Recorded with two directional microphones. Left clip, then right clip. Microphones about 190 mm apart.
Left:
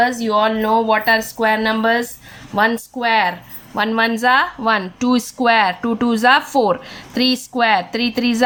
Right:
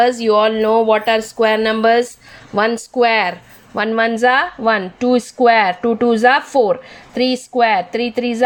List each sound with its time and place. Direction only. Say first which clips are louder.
0.0 s speech: right 3 dB; 40° right (ahead or behind); by 8.4 s 15° right (ahead or behind)